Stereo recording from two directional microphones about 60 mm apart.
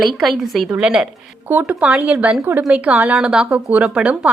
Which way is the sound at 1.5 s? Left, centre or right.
Right.